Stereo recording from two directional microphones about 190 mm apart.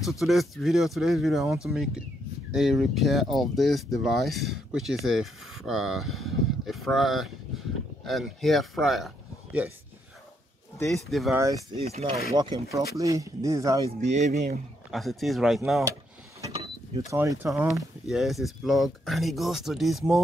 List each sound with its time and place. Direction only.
0.2 s speech: centre (ahead or behind)
10.9 s speech: centre (ahead or behind)
11.3 s speech: 15° right (ahead or behind)
11.8 s speech: 35° right (ahead or behind)
12.4 s speech: 25° right (ahead or behind)
13.8 s speech: 40° right (ahead or behind)
14.9 s speech: centre (ahead or behind)
15.8 s vehicle: 15° right (ahead or behind)
17.1 s speech: 15° right (ahead or behind)